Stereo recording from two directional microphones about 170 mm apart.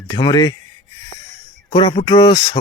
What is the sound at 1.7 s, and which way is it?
Speech, 30° left (ahead or behind).